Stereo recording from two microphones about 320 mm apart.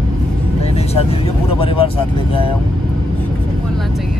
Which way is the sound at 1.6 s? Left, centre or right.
Centre.